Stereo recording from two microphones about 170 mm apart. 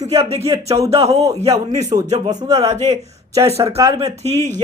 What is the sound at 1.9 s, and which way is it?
Speech, 20° right (ahead or behind).